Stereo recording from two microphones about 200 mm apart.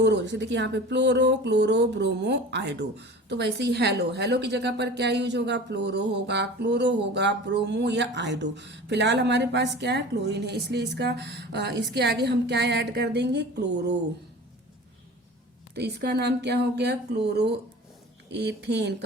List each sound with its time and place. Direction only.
0.0 s speech: 60° right (ahead or behind)
15.7 s speech: 55° right (ahead or behind)